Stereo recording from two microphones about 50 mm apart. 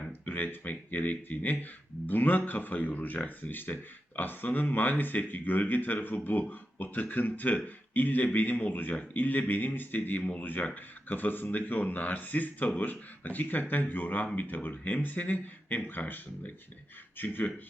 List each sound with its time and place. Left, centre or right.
0.1 s speech: left